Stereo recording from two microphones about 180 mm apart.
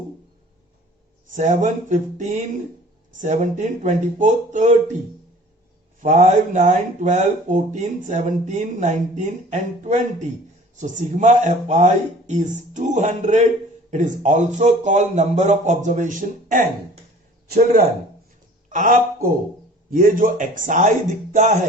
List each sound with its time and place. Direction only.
1.3 s speech: 40° right (ahead or behind)
6.0 s a man's voice: 40° right (ahead or behind)
18.7 s a man's voice: 45° right (ahead or behind)